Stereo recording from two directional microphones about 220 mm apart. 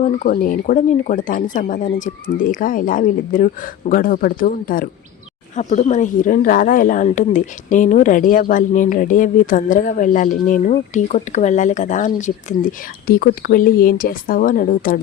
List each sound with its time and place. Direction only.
0.0 s speech: 35° left (ahead or behind)